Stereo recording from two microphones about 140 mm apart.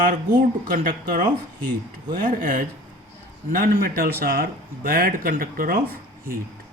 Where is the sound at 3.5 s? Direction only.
90° right.